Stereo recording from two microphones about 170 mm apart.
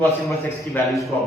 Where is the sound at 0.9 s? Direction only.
Centre (ahead or behind).